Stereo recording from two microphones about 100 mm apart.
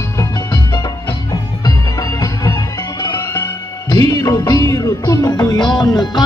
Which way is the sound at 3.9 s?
40° left (ahead or behind).